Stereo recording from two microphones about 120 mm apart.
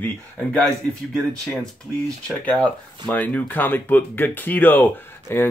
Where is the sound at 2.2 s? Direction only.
10° left (ahead or behind).